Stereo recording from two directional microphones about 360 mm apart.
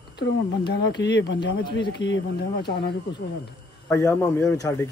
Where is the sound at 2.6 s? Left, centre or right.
Centre.